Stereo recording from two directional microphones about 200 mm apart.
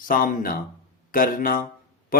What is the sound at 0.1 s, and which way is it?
A man's voice, 45° left (ahead or behind).